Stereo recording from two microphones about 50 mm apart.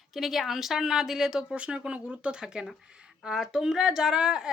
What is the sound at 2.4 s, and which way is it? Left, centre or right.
Speech, centre.